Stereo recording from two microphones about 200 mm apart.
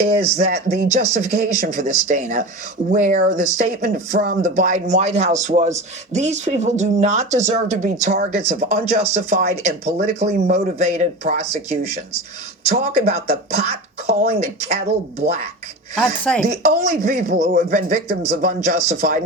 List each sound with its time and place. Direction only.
0.1 s speech: 35° right (ahead or behind)
16.2 s speech: 5° left (ahead or behind)
16.5 s speech: 35° right (ahead or behind)